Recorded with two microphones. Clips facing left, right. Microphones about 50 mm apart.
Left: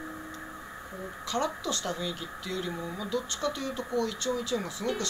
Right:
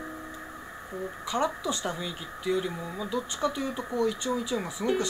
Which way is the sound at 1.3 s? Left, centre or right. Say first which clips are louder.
Right 2 dB; centre.